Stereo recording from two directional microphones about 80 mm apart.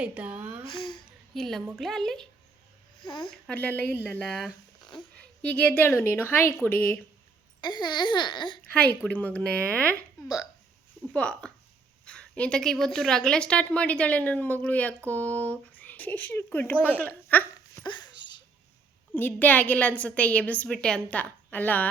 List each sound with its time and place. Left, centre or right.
0.0 s a sound: centre
0.7 s a sound: left
1.3 s a woman's voice: centre
3.0 s speech: left
3.5 s a woman's voice: centre
4.3 s speech: centre
5.1 s a woman's voice: centre
7.6 s speech: left
8.7 s a woman's voice: centre
11.1 s a woman's voice: centre
17.8 s a sound: left
19.1 s a woman's voice: left